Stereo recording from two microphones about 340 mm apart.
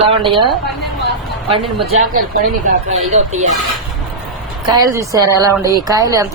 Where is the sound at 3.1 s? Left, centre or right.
Centre.